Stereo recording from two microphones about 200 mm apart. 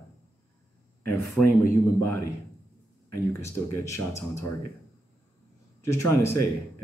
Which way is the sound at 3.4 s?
15° left (ahead or behind).